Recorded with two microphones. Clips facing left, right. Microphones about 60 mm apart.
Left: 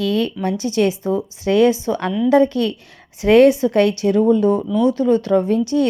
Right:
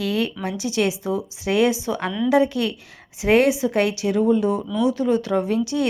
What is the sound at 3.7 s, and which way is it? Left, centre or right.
A woman's voice, left.